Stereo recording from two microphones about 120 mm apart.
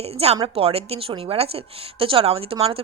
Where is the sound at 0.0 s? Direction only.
60° right (ahead or behind).